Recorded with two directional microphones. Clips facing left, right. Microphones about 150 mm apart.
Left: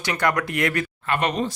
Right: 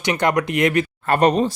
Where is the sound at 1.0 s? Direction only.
40° right (ahead or behind).